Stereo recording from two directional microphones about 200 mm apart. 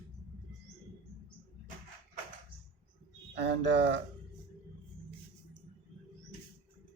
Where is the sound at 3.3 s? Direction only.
60° right (ahead or behind).